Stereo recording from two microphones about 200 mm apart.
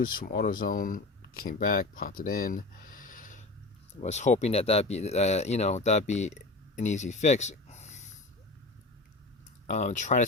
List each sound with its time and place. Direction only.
0.0 s speech: 45° left (ahead or behind)
9.6 s speech: 35° left (ahead or behind)